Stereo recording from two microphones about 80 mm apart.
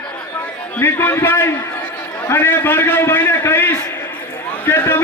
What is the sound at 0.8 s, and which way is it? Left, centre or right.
A man's voice, left.